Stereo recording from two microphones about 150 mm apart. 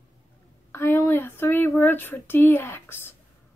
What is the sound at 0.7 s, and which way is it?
A woman's voice, 15° left (ahead or behind).